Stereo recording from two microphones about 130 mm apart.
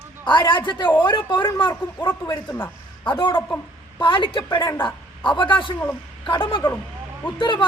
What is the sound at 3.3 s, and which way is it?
Speech, 15° left (ahead or behind).